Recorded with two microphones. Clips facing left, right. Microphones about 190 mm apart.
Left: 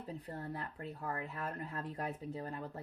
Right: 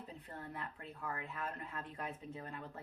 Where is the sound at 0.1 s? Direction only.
35° left (ahead or behind).